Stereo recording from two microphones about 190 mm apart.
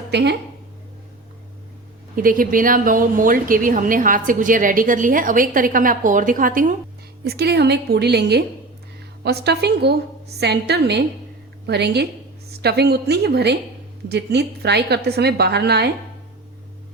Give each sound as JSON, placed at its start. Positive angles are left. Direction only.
{"t": 0.1, "sound": "speech", "side_deg": -60}
{"t": 2.1, "sound": "a woman's voice", "side_deg": -50}
{"t": 7.3, "sound": "a woman's voice", "side_deg": -60}